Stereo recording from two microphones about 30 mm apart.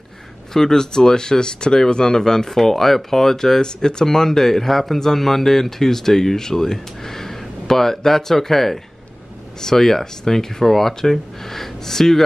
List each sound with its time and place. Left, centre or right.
0.5 s speech: centre